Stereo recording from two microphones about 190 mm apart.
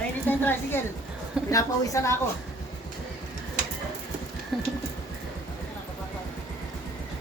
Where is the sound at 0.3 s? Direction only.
10° left (ahead or behind).